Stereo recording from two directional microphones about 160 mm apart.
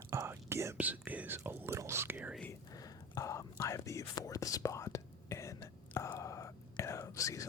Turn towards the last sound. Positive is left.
turn(degrees=20)  # may be behind; listen again after turning